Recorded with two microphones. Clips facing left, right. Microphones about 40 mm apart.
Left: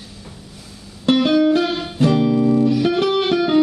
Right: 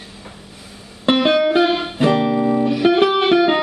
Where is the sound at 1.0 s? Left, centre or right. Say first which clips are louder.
Even; right.